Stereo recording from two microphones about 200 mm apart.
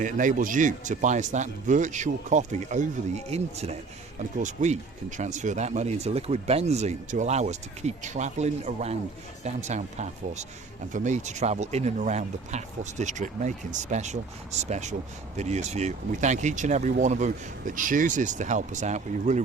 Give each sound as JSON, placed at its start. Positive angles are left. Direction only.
{"t": 0.0, "sound": "speech", "side_deg": -40}